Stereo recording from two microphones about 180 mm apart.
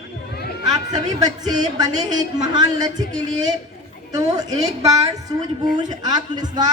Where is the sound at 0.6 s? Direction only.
40° right (ahead or behind).